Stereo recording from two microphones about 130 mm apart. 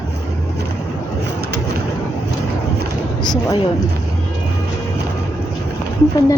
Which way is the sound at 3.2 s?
35° left (ahead or behind).